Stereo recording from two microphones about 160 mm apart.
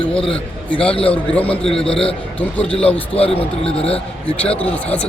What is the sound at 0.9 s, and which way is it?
Speech, 35° left (ahead or behind).